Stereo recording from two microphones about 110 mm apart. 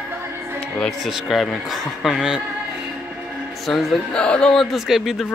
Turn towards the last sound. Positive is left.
turn(degrees=-5)  # may be behind; listen again after turning